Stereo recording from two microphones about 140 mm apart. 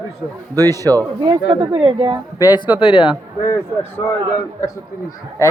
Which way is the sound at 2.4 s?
30° left (ahead or behind).